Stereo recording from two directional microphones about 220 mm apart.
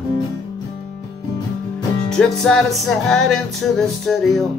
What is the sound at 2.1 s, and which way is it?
Music, centre (ahead or behind).